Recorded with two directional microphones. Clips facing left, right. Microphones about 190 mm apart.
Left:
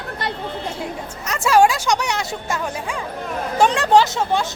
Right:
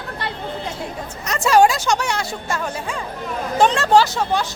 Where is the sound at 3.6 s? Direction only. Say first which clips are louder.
Even; 15° left (ahead or behind).